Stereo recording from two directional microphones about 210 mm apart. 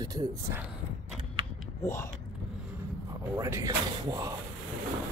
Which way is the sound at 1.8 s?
15° left (ahead or behind).